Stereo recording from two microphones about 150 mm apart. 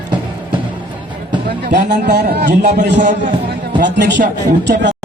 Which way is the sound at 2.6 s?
55° right (ahead or behind).